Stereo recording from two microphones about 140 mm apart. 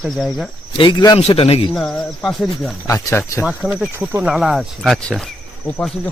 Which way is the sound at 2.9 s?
20° left (ahead or behind).